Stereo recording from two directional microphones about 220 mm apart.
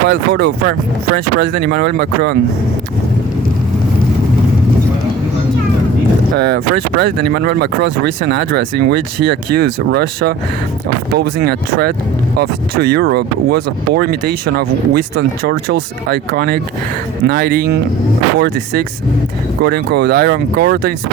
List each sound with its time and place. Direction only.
0.1 s speech: 50° right (ahead or behind)
6.3 s speech: 45° right (ahead or behind)